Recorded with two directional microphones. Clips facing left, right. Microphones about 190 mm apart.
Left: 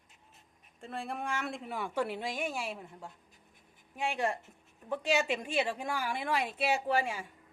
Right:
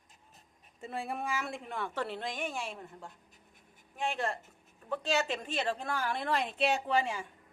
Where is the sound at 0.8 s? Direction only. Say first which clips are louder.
Right 1 dB; 5° right (ahead or behind).